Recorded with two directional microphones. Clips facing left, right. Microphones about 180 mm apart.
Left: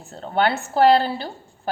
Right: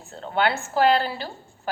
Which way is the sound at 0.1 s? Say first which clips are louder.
Left 2 dB; 40° left (ahead or behind).